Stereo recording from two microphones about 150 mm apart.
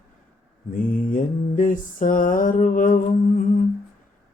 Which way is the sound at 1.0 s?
65° left (ahead or behind).